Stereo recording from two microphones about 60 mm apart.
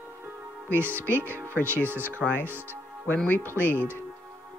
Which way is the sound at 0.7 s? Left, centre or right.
Right.